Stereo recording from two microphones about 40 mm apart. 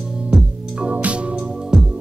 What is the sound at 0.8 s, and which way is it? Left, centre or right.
Organ, right.